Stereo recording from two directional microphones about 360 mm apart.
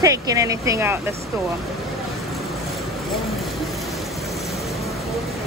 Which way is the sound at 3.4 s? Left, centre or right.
Centre.